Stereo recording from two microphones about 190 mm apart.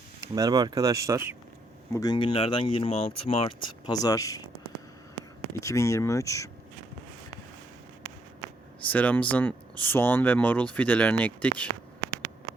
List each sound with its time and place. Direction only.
0.2 s speech: 20° right (ahead or behind)
1.9 s speech: 20° left (ahead or behind)
4.0 s speech: 20° left (ahead or behind)
5.5 s speech: 15° left (ahead or behind)
8.9 s speech: 10° left (ahead or behind)